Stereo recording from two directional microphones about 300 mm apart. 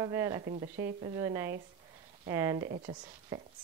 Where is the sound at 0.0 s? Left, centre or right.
Centre.